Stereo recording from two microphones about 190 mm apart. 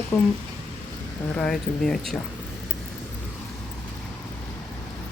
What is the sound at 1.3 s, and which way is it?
Speech, 5° left (ahead or behind).